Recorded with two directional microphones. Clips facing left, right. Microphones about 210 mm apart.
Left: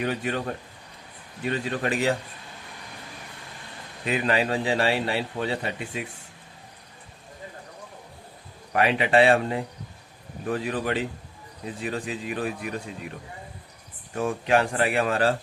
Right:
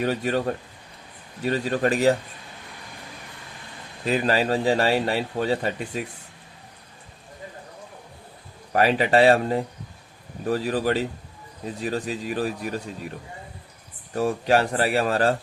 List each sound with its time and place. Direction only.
0.0 s a man's voice: 40° right (ahead or behind)
4.0 s a man's voice: 35° right (ahead or behind)
8.7 s a man's voice: 40° right (ahead or behind)
14.2 s a man's voice: 35° right (ahead or behind)